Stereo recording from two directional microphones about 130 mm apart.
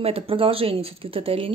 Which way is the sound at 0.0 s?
45° right (ahead or behind).